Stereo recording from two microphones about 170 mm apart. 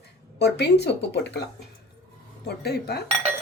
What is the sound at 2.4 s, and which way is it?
Speech, 70° left (ahead or behind).